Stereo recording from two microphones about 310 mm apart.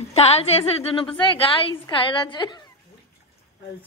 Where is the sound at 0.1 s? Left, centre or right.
Centre.